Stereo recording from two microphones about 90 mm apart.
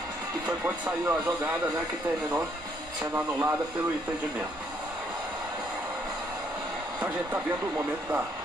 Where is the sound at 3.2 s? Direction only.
25° right (ahead or behind).